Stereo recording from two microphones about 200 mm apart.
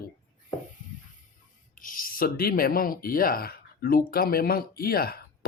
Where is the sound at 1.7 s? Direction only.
40° left (ahead or behind).